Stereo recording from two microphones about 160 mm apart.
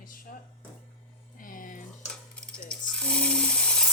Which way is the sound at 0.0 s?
60° left (ahead or behind).